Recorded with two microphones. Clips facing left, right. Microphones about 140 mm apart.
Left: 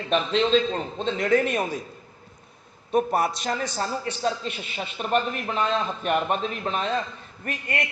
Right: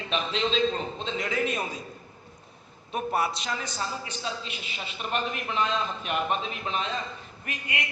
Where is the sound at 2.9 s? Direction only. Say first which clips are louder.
Left 6 dB; 40° left (ahead or behind).